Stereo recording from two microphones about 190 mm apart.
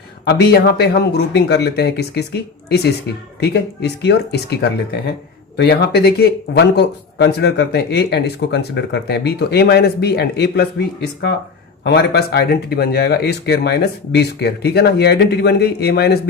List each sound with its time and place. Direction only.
0.3 s speech: 60° left (ahead or behind)